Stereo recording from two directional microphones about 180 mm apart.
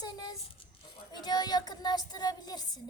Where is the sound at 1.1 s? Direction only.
20° left (ahead or behind).